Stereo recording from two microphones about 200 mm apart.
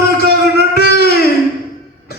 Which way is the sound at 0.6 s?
50° left (ahead or behind).